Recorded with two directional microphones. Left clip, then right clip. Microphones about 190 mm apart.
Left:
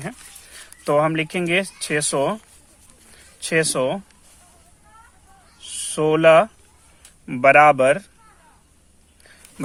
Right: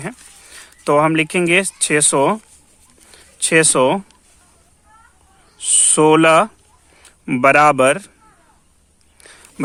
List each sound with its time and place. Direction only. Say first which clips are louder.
0.0 s speech: right 4 dB; 25° right (ahead or behind)
3.4 s speech: right 7 dB; 45° right (ahead or behind)
5.5 s a man's voice: right 10 dB; 45° right (ahead or behind)
9.2 s a sound: right 7 dB; 35° right (ahead or behind)